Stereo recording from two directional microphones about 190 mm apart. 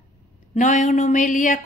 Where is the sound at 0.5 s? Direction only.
40° left (ahead or behind).